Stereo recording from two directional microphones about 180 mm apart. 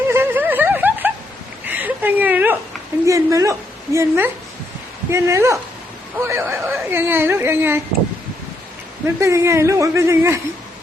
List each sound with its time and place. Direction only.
0.1 s snicker: 10° right (ahead or behind)
1.6 s a sound: 10° right (ahead or behind)
3.1 s speech: 15° right (ahead or behind)
9.0 s speech: 15° right (ahead or behind)